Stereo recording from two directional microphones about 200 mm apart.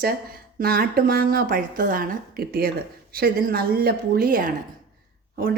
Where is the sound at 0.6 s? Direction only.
50° right (ahead or behind).